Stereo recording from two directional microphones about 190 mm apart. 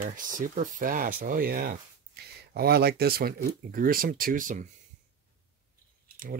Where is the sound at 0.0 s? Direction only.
45° right (ahead or behind).